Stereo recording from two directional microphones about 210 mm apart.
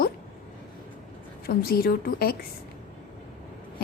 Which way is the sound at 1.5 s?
45° left (ahead or behind).